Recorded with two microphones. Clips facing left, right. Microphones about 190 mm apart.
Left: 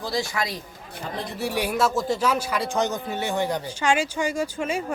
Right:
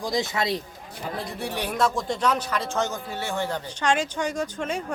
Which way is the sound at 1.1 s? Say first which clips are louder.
Left 4 dB; centre (ahead or behind).